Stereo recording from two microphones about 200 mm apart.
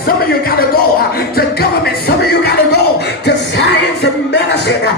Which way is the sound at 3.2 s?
55° left (ahead or behind).